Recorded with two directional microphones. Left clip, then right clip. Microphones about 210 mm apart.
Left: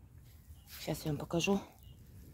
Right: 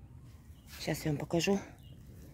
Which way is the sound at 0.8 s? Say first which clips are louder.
Right 3 dB; 20° right (ahead or behind).